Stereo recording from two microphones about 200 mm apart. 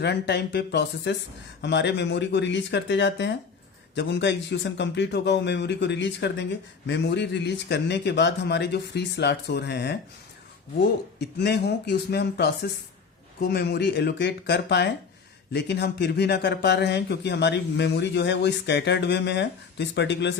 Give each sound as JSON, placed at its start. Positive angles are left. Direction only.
{"t": 0.0, "sound": "speech", "side_deg": 55}
{"t": 11.2, "sound": "speech", "side_deg": 55}